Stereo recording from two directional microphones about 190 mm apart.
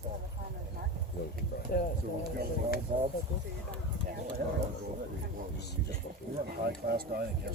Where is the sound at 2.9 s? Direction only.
40° right (ahead or behind).